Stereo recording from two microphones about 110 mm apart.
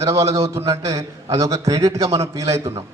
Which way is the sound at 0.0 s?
25° right (ahead or behind).